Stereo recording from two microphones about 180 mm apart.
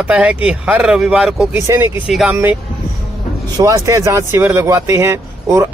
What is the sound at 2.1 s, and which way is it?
Speech, centre (ahead or behind).